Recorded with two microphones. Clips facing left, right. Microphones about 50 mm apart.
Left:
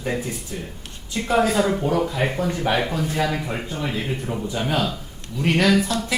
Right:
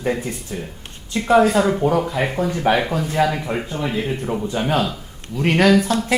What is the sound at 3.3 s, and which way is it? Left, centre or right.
Speech, centre.